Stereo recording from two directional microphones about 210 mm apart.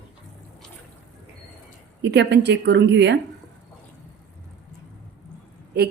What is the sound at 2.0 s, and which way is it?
A woman's voice, 55° right (ahead or behind).